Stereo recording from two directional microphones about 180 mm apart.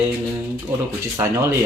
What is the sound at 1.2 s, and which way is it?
Speech, 15° right (ahead or behind).